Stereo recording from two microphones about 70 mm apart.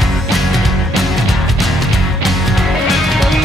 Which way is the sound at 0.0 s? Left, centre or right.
Centre.